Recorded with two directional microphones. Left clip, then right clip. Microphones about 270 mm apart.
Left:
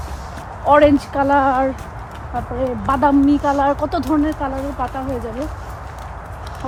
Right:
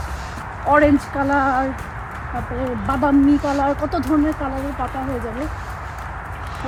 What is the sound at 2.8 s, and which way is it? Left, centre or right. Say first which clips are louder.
Speech: left 2 dB; centre.